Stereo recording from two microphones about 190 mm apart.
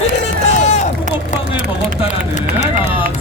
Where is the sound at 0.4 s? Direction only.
35° left (ahead or behind).